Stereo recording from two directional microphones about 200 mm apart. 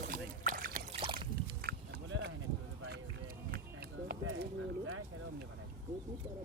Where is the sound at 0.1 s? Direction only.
40° right (ahead or behind).